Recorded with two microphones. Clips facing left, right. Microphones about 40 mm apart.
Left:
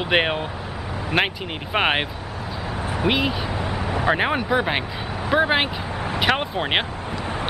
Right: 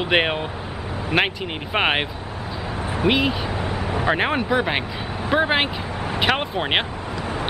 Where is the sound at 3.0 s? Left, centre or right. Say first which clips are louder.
Right 2 dB; centre.